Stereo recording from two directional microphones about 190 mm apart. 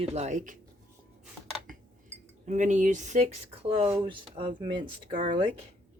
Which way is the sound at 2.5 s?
40° right (ahead or behind).